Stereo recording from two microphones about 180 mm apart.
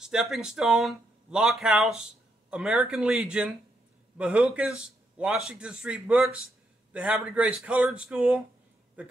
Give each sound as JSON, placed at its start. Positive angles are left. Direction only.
{"t": 0.0, "sound": "a man's voice", "side_deg": -5}